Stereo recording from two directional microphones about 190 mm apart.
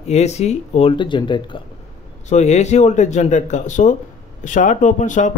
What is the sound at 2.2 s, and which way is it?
Speech, 35° left (ahead or behind).